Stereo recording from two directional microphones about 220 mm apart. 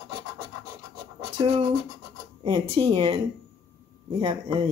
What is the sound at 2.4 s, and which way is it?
Speech, 25° right (ahead or behind).